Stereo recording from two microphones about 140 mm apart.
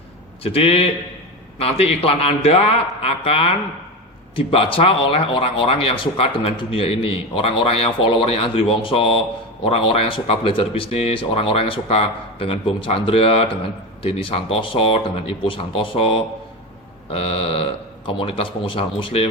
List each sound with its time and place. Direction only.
0.4 s a man's voice: 45° left (ahead or behind)